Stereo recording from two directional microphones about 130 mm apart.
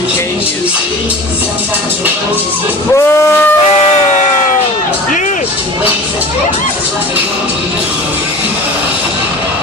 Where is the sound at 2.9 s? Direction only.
20° left (ahead or behind).